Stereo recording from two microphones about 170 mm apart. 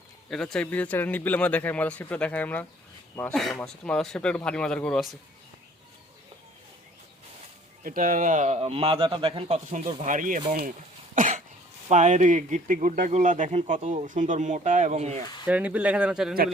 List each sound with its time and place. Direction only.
0.3 s a man's voice: 5° left (ahead or behind)
7.9 s speech: 55° right (ahead or behind); by 9.6 s 35° right (ahead or behind)
9.6 s speech: 45° right (ahead or behind)
11.1 s cough: 50° right (ahead or behind)
11.9 s speech: 45° right (ahead or behind)
15.4 s speech: 10° right (ahead or behind)